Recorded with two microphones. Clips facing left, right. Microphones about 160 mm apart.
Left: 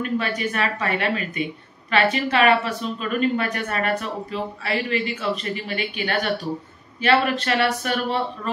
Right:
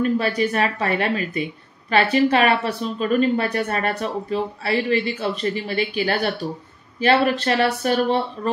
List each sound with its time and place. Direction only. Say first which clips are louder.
0.0 s speech: right 5 dB; 35° right (ahead or behind)